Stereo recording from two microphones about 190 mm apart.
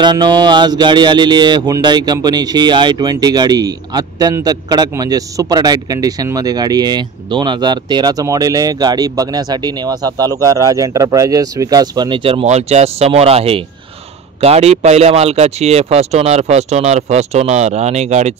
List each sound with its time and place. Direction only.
0.0 s speech: 20° right (ahead or behind)